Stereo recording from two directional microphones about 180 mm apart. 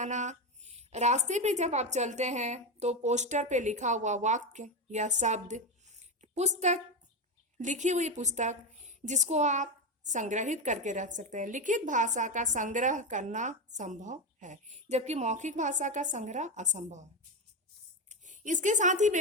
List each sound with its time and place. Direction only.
0.0 s a woman's voice: 40° right (ahead or behind)
18.1 s speech: 45° right (ahead or behind)